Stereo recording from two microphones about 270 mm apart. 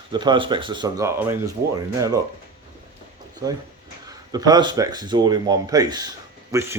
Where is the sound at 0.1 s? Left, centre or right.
Centre.